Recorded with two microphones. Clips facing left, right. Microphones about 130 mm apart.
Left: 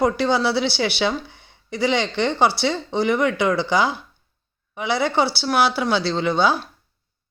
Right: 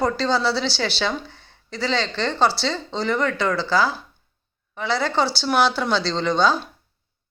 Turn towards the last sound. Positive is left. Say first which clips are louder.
# even
turn(degrees=10)  # may be behind; listen again after turning